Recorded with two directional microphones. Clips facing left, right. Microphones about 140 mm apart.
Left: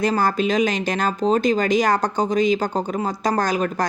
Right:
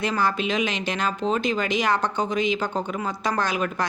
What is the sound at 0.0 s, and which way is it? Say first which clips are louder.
Speech: left 4 dB; 40° left (ahead or behind).